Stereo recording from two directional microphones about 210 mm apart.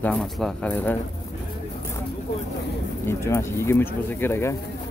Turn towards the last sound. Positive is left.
turn(degrees=10)  # may be behind; listen again after turning